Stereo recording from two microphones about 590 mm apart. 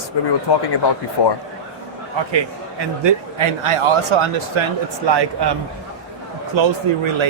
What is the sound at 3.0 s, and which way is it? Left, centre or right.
Speech, right.